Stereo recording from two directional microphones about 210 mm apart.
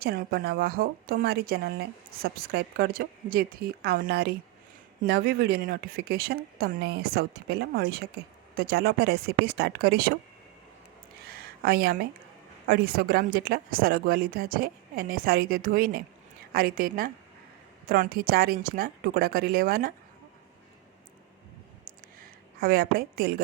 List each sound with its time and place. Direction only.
0.0 s a woman's voice: 45° right (ahead or behind)
11.3 s a sound: 45° right (ahead or behind)
12.6 s a woman's voice: 45° right (ahead or behind)
22.2 s a woman's voice: 45° right (ahead or behind)